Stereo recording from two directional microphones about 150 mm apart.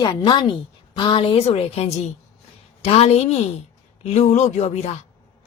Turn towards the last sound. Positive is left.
turn(degrees=45)  # may be behind; listen again after turning